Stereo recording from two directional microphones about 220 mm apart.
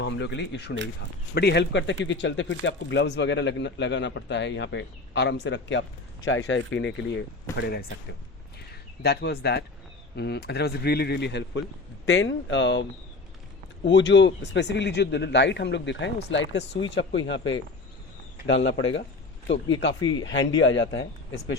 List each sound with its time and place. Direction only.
0.0 s speech: 50° left (ahead or behind)
9.0 s speech: 45° left (ahead or behind)
13.8 s speech: 55° left (ahead or behind)
20.0 s speech: 15° left (ahead or behind)
20.2 s speech: 55° left (ahead or behind)